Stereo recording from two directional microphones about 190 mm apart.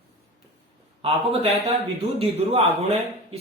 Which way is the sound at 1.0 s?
30° right (ahead or behind).